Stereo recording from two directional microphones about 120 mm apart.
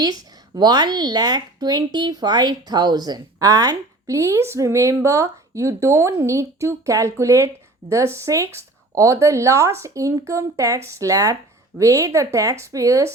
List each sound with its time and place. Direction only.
0.0 s a woman's voice: 35° right (ahead or behind)